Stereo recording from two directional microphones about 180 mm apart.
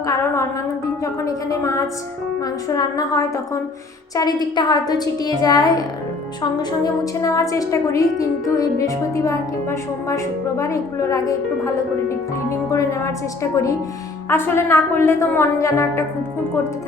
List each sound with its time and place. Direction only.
0.0 s music: 15° left (ahead or behind)
1.0 s a woman's voice: 20° left (ahead or behind)